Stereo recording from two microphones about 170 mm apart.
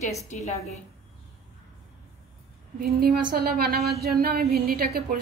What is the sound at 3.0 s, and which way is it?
A woman's voice, 65° right (ahead or behind).